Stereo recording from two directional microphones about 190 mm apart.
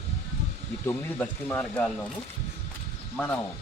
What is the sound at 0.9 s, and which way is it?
Speech, 10° left (ahead or behind).